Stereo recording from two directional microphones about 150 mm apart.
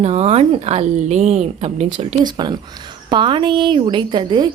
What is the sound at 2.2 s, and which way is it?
A woman's voice, 30° right (ahead or behind).